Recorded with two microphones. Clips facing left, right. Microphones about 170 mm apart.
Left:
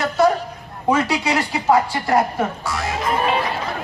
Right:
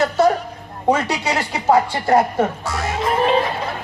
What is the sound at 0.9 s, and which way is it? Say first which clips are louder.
A man's voice: even; 30° right (ahead or behind).